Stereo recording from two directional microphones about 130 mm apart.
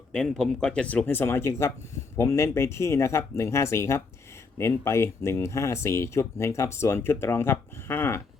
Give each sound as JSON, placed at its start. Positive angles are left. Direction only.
{"t": 0.1, "sound": "speech", "side_deg": 5}